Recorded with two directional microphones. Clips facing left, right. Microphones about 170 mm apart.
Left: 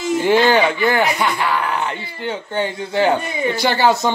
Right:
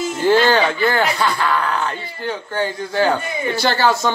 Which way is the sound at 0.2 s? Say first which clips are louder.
Even; 15° left (ahead or behind).